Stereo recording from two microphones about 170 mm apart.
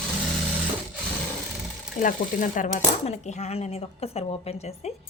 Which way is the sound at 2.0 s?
45° left (ahead or behind).